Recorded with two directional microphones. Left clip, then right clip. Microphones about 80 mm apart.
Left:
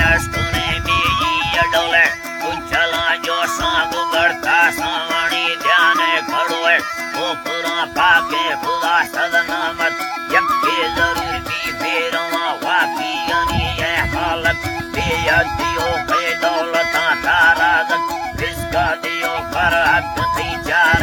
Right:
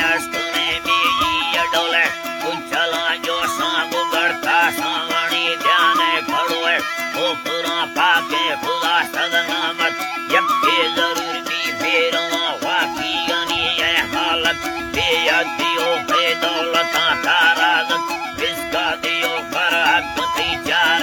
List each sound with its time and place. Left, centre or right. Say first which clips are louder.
0.0 s music: left 3 dB; centre
6.7 s music: left 3 dB; centre
9.1 s music: left 2 dB; centre
10.8 s music: left 1 dB; left
14.9 s music: left 1 dB; centre
19.8 s music: left 1 dB; centre